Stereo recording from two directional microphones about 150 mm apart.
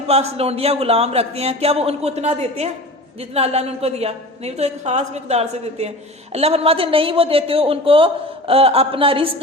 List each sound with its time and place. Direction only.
0.1 s a woman's voice: 45° right (ahead or behind)